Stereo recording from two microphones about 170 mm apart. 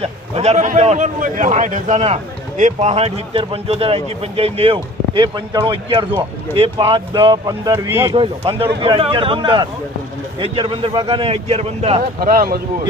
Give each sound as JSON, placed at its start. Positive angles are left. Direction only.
{"t": 0.0, "sound": "a man's voice", "side_deg": -40}
{"t": 8.1, "sound": "a man's voice", "side_deg": -30}
{"t": 12.2, "sound": "speech", "side_deg": -55}